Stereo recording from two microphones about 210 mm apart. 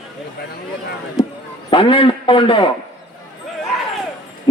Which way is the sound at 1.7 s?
25° left (ahead or behind).